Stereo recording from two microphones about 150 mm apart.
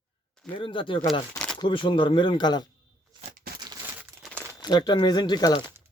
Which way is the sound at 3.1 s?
30° right (ahead or behind).